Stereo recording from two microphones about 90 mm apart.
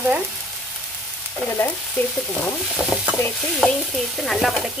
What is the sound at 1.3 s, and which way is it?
Stir, 15° left (ahead or behind).